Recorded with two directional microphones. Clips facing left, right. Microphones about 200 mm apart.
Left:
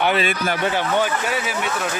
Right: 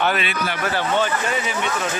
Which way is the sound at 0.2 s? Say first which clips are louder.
Left 4 dB; 45° left (ahead or behind).